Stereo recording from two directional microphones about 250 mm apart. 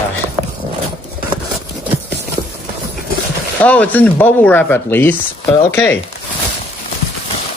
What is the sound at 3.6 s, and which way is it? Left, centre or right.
Speech, centre.